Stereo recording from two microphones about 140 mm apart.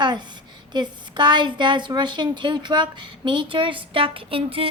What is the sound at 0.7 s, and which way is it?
A woman's voice, 30° right (ahead or behind).